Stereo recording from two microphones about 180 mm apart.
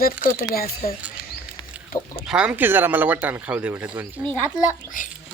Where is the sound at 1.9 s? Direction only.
55° left (ahead or behind).